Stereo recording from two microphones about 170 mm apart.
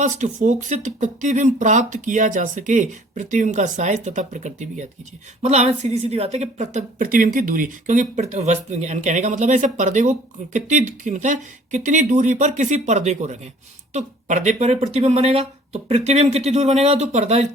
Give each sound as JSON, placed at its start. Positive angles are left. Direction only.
{"t": 0.0, "sound": "a woman's voice", "side_deg": -45}